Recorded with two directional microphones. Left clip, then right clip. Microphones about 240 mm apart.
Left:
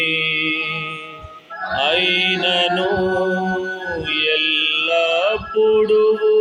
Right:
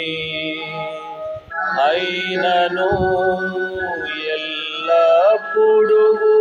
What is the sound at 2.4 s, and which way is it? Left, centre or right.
Music, left.